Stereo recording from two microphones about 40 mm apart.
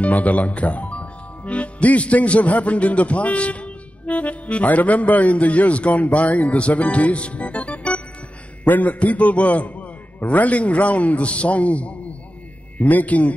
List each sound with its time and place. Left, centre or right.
0.0 s speech: left
8.6 s a man's voice: left